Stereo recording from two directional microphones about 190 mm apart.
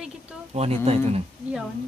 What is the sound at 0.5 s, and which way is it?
Speech, 35° right (ahead or behind).